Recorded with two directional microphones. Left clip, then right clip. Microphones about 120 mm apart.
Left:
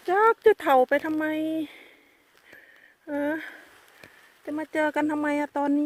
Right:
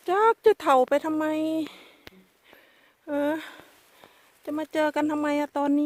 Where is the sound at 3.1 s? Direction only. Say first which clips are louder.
Right 2 dB; 25° right (ahead or behind).